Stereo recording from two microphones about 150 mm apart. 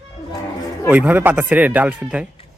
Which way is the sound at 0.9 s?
10° right (ahead or behind).